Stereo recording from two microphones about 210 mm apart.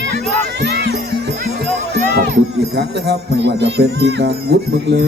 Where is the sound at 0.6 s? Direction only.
50° right (ahead or behind).